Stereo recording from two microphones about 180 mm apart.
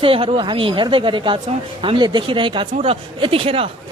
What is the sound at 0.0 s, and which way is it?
A man's voice, 30° right (ahead or behind).